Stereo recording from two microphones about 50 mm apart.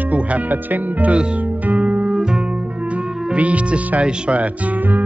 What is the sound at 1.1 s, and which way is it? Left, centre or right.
Music, right.